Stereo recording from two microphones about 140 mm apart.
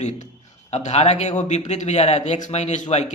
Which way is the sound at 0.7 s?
50° left (ahead or behind).